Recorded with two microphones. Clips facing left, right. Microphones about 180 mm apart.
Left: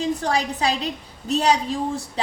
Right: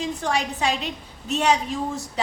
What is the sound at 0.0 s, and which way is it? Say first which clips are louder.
A woman's voice: left 3 dB; 35° left (ahead or behind).